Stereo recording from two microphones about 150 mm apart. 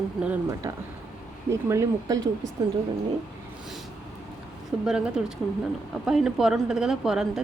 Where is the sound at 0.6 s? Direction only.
20° right (ahead or behind).